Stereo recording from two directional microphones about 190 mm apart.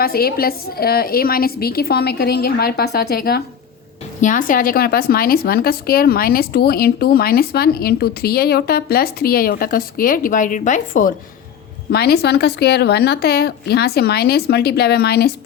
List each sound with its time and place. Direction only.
0.0 s a woman's voice: 50° left (ahead or behind)
4.2 s a woman's voice: 45° left (ahead or behind)
11.9 s a woman's voice: 55° left (ahead or behind)